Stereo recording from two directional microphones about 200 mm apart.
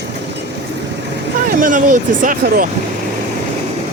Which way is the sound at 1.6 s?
40° right (ahead or behind).